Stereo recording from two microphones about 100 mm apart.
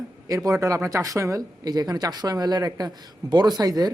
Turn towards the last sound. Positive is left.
turn(degrees=-40)  # may be behind; listen again after turning